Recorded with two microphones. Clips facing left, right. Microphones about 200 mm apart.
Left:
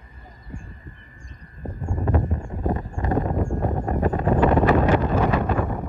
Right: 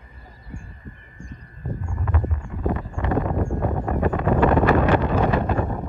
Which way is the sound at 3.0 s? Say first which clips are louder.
Right 1 dB; 35° left (ahead or behind).